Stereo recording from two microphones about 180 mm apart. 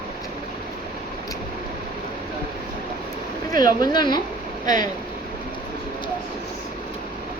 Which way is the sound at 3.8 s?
25° left (ahead or behind).